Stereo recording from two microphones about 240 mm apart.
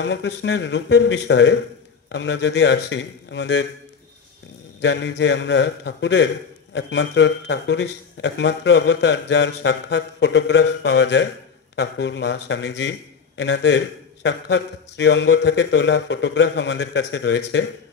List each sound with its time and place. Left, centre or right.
0.0 s a man's voice: left
4.7 s a man's voice: left